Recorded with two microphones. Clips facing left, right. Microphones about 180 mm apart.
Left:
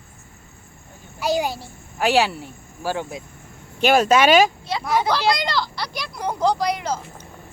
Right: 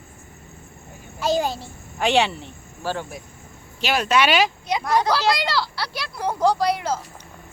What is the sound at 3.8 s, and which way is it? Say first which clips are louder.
Speech: left 5 dB; 50° left (ahead or behind).